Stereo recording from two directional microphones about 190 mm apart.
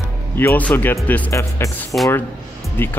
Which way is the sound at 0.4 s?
10° left (ahead or behind).